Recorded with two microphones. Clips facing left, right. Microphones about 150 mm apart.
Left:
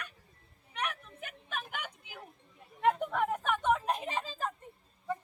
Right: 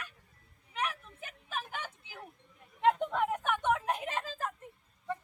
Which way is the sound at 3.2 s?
10° right (ahead or behind).